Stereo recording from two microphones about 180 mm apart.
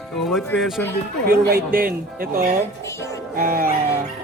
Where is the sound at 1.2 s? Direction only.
55° right (ahead or behind).